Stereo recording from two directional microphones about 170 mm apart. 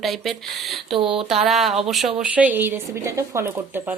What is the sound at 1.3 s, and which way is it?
A woman's voice, centre (ahead or behind).